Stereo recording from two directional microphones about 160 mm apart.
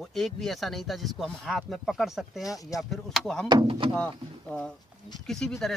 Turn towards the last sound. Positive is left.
turn(degrees=0)  # may be behind; listen again after turning